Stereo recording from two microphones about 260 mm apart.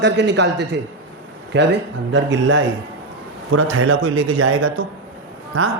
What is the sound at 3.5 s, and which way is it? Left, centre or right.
A man's voice, right.